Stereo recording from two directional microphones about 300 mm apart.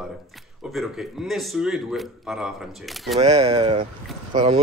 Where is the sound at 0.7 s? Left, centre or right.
Centre.